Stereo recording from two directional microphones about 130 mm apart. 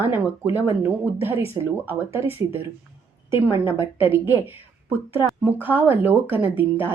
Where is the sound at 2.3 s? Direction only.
15° right (ahead or behind).